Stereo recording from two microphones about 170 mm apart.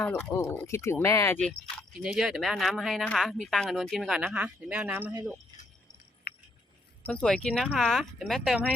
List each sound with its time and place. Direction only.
0.0 s speech: 10° left (ahead or behind)
1.4 s speech: 5° left (ahead or behind)
6.3 s a sound: 65° left (ahead or behind)
7.0 s speech: 5° left (ahead or behind)